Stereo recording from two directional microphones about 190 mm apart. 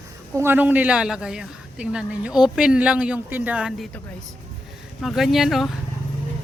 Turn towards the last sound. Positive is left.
turn(degrees=0)  # may be behind; listen again after turning